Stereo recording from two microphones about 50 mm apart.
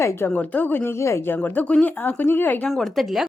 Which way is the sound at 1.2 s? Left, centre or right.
Left.